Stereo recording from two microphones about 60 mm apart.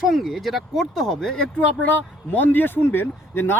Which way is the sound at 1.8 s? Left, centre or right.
Left.